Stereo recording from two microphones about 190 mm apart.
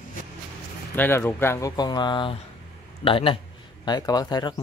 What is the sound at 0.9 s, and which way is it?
Speech, 10° left (ahead or behind).